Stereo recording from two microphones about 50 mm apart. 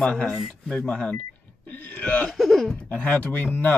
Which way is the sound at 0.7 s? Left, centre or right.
Centre.